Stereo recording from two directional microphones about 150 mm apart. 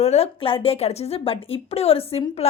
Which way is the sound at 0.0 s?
45° left (ahead or behind).